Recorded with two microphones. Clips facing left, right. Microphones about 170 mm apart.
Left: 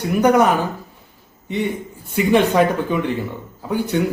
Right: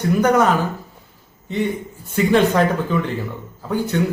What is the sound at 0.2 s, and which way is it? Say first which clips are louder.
Speech: left 3 dB; 15° left (ahead or behind).